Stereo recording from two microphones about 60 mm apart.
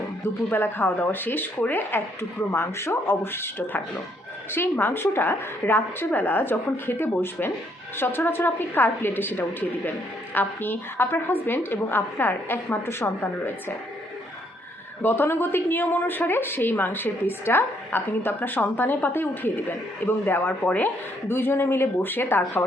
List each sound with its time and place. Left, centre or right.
0.5 s a woman's voice: left
2.5 s a woman's voice: left
15.0 s a woman's voice: left
21.2 s a woman's voice: left